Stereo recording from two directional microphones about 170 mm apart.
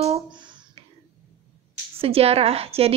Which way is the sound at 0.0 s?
35° right (ahead or behind).